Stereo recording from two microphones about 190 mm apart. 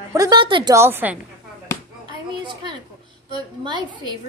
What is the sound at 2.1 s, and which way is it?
A child's voice, 25° right (ahead or behind).